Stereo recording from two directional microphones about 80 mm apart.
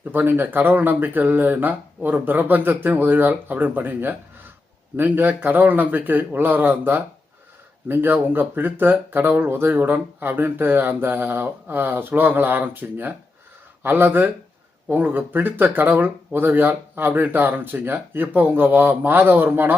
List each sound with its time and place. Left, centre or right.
0.0 s speech: right